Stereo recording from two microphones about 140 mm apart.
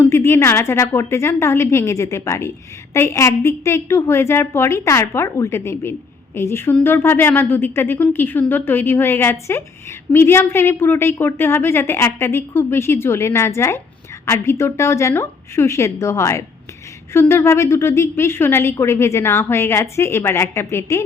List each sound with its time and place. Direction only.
0.0 s a woman's voice: 20° left (ahead or behind)